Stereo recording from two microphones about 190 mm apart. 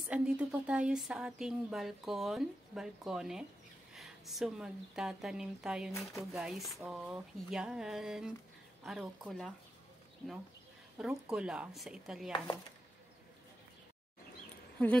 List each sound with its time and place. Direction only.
0.1 s speech: 5° right (ahead or behind)
11.0 s speech: 5° right (ahead or behind)